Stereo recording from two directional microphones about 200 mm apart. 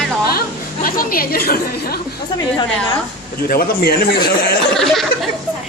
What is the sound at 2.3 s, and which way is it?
Speech, 20° left (ahead or behind).